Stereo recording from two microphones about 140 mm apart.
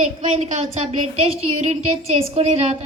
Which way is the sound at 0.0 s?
60° right (ahead or behind).